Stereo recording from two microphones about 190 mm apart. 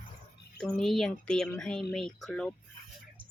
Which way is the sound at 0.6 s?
5° left (ahead or behind).